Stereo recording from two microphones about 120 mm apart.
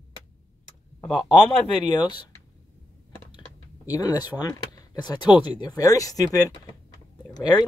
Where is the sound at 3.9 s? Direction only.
30° left (ahead or behind).